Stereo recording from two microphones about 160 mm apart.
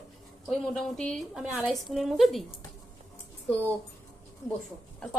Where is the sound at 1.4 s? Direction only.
10° right (ahead or behind).